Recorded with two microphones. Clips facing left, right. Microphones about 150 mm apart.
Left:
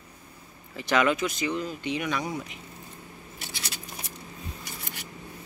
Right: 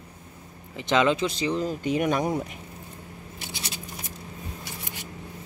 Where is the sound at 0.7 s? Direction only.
20° right (ahead or behind); by 2.4 s 50° right (ahead or behind).